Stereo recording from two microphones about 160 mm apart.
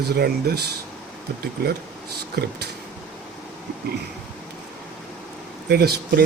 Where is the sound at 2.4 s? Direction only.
90° right.